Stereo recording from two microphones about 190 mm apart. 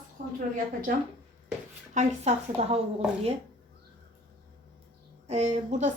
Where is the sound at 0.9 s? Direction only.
45° right (ahead or behind).